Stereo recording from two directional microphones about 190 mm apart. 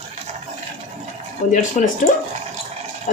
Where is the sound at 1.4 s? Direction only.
40° left (ahead or behind).